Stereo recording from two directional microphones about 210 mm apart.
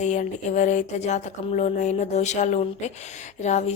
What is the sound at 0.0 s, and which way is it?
A woman's voice, 35° left (ahead or behind).